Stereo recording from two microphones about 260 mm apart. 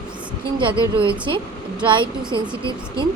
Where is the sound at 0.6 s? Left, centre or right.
Centre.